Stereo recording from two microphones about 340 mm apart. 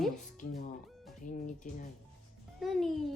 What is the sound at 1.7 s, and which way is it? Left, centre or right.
Speech, left.